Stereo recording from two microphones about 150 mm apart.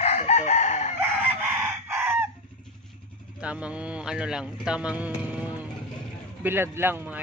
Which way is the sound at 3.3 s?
10° right (ahead or behind).